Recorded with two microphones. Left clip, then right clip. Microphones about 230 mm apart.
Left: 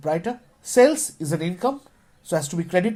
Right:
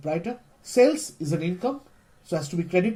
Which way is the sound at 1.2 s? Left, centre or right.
Left.